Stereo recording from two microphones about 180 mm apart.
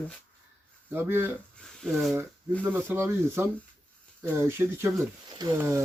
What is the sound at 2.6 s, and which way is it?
Speech, 10° right (ahead or behind).